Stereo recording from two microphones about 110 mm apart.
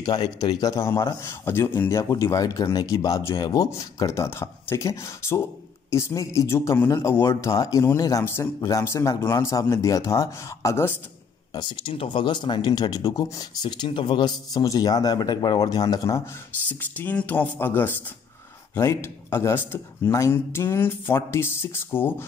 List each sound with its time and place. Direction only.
0.0 s speech: 35° left (ahead or behind)
11.5 s speech: 50° left (ahead or behind); by 16.2 s 35° left (ahead or behind)
16.6 s speech: 15° left (ahead or behind)